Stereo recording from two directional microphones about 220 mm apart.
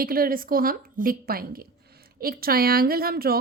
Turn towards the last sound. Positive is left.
turn(degrees=-45)  # may be behind; listen again after turning